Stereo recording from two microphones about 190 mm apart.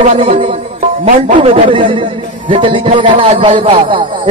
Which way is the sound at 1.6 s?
25° right (ahead or behind).